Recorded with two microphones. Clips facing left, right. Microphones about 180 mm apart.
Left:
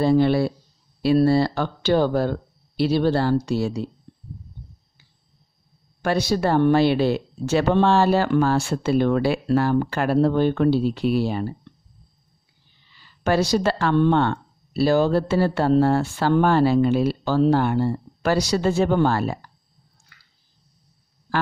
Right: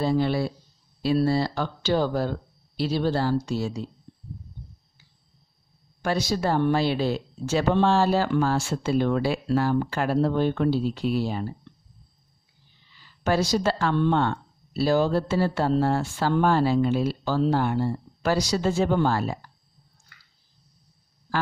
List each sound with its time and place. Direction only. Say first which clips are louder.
0.0 s speech: left 6 dB; 60° left (ahead or behind)
6.0 s speech: left 4 dB; 65° left (ahead or behind)
13.2 s speech: left 3 dB; 65° left (ahead or behind)